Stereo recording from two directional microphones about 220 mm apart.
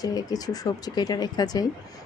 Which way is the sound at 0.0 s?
15° left (ahead or behind).